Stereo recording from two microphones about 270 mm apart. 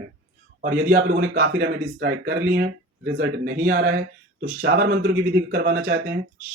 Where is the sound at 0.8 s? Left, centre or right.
Right.